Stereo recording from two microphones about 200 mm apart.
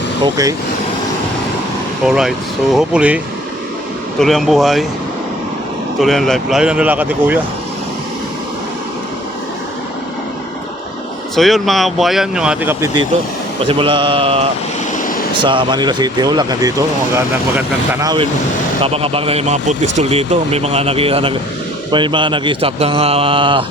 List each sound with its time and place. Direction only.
2.0 s speech: centre (ahead or behind)
4.2 s speech: centre (ahead or behind)
6.0 s speech: centre (ahead or behind)
11.3 s speech: centre (ahead or behind)
13.7 s speech: 25° right (ahead or behind)
18.0 s speech: 20° right (ahead or behind)